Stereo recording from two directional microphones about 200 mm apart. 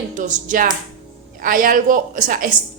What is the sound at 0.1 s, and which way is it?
A woman's voice, 40° right (ahead or behind).